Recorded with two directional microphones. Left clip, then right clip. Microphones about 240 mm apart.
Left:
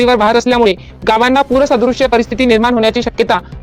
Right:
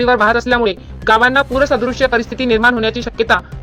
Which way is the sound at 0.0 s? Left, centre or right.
Left.